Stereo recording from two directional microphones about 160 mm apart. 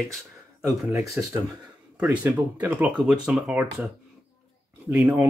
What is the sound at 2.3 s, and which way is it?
Speech, 10° right (ahead or behind).